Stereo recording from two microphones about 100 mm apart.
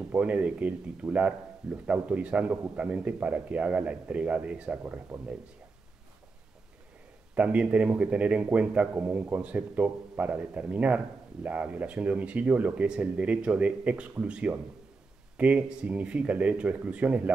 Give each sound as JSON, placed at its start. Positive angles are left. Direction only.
{"t": 0.1, "sound": "speech", "side_deg": -15}
{"t": 7.3, "sound": "speech", "side_deg": -10}